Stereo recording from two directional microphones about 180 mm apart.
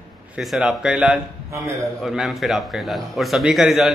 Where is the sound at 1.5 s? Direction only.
15° right (ahead or behind).